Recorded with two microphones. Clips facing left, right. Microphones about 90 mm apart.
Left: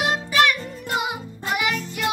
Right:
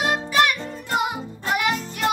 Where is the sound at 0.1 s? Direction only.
20° right (ahead or behind).